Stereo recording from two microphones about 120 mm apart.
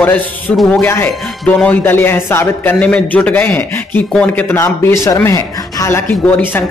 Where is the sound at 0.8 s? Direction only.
20° left (ahead or behind).